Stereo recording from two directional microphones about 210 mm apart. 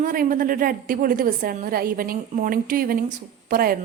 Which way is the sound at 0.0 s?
40° right (ahead or behind).